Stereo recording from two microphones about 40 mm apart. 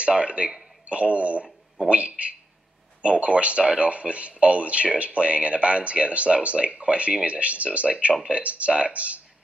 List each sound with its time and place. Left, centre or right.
0.1 s speech: right